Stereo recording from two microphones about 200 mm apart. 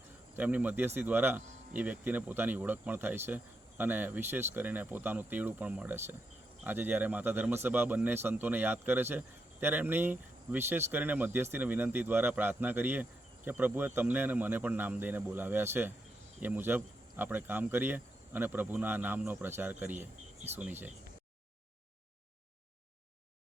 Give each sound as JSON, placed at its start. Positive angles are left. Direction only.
{"t": 0.3, "sound": "speech", "side_deg": -10}